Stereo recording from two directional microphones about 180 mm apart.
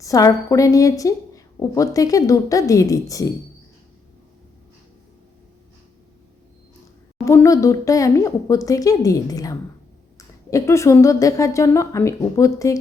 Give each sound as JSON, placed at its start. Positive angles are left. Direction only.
{"t": 0.0, "sound": "a woman's voice", "side_deg": 20}
{"t": 7.3, "sound": "a woman's voice", "side_deg": 15}